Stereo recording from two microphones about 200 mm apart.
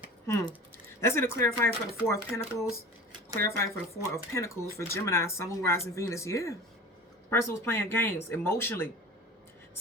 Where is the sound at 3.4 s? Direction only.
15° left (ahead or behind).